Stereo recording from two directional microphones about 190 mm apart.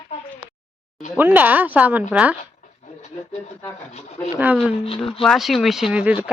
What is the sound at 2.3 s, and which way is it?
Speech, 40° left (ahead or behind).